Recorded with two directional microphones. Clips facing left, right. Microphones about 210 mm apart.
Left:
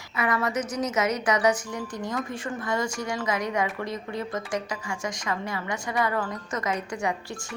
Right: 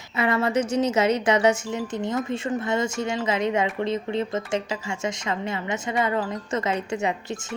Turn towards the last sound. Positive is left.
turn(degrees=-25)  # may be behind; listen again after turning